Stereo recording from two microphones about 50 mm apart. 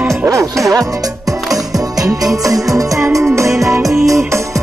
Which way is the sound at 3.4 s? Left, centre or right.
Right.